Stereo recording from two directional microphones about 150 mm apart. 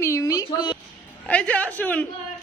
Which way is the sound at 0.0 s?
20° left (ahead or behind).